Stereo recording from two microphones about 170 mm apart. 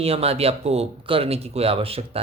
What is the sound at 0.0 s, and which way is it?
Speech, 35° right (ahead or behind).